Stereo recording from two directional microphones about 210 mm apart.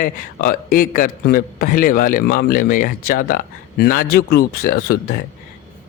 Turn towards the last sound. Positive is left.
turn(degrees=45)  # may be behind; listen again after turning